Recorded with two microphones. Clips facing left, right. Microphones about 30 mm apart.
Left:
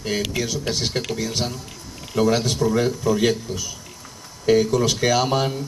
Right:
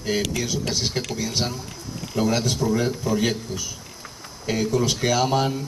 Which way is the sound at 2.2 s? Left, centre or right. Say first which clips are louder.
Left 4 dB; left.